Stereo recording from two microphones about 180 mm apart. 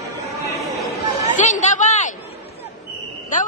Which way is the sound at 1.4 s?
40° left (ahead or behind).